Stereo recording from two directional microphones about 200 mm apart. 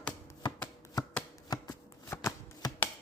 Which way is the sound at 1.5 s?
15° left (ahead or behind).